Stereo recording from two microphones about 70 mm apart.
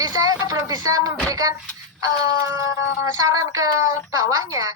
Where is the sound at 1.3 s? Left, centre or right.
Right.